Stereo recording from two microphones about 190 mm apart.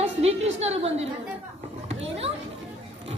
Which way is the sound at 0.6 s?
35° right (ahead or behind).